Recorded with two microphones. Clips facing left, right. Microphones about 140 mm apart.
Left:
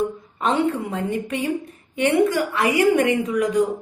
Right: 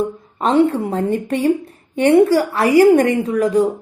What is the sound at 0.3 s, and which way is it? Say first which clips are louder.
A woman's voice: right 6 dB; 35° right (ahead or behind).